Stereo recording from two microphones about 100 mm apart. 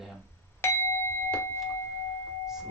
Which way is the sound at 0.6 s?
25° left (ahead or behind).